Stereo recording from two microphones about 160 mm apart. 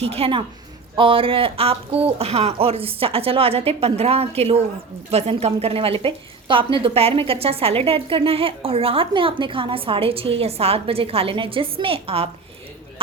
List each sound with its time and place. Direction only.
0.0 s a woman's voice: 40° right (ahead or behind)